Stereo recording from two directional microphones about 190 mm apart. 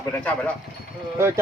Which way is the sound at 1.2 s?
15° right (ahead or behind).